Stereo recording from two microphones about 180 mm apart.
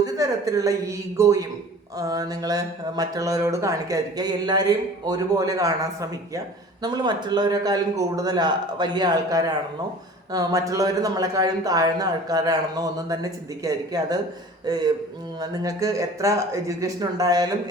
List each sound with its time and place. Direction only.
0.0 s a woman's voice: 20° right (ahead or behind)